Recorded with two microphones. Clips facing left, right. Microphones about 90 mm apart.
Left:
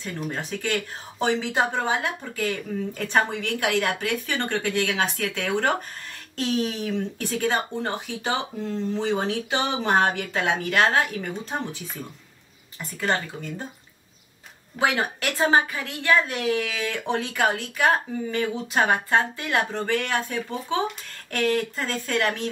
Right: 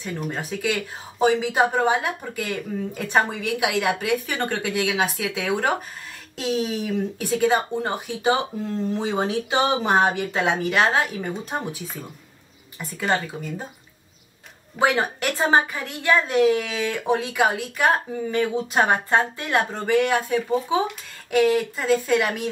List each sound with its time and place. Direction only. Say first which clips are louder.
0.0 s speech: right 2 dB; 10° right (ahead or behind)
13.0 s speech: right 2 dB; 10° right (ahead or behind)
14.8 s a woman's voice: right 3 dB; 20° right (ahead or behind)
15.8 s speech: right 1 dB; 10° right (ahead or behind)